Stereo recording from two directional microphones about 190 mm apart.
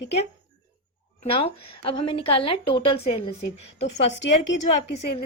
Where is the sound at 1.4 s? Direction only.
25° left (ahead or behind).